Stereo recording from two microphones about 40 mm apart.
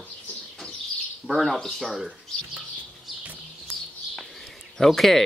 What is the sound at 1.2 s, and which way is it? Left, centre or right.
Speech, centre.